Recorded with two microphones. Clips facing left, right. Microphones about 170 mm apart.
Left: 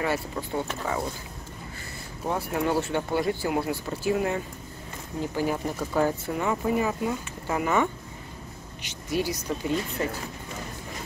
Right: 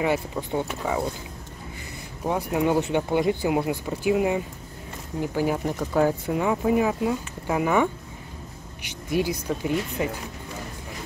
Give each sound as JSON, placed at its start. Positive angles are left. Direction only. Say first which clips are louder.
{"t": 0.0, "sound": "speech", "louder": "right 3 dB", "side_deg": -20}
{"t": 2.2, "sound": "speech", "louder": "right 3 dB", "side_deg": -15}